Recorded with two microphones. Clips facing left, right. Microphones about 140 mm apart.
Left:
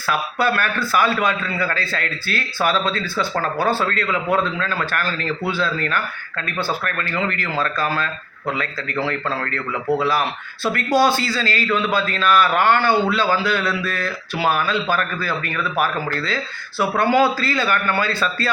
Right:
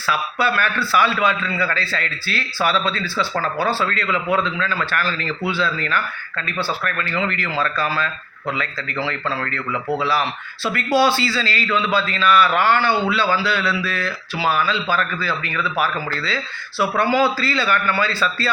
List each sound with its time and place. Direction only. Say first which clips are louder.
0.1 s a man's voice: left 1 dB; 50° left (ahead or behind)
10.0 s a man's voice: left 1 dB; 45° left (ahead or behind)